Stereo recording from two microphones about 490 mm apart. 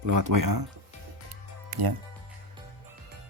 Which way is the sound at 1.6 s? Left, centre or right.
Right.